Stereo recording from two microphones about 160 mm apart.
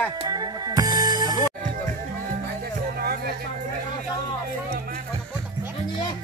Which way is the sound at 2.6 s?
75° right (ahead or behind).